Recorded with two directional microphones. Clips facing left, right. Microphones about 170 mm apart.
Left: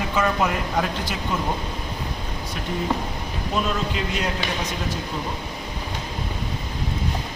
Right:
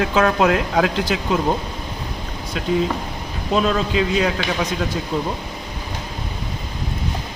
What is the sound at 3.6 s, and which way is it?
Speech, 85° right.